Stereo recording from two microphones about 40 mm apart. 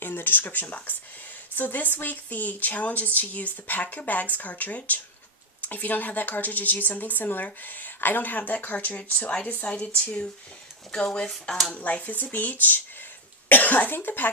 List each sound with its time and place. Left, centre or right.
0.0 s speech: left
10.9 s speech: left